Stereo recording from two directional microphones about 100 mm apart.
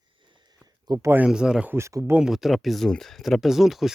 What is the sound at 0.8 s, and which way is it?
Speech, 40° right (ahead or behind).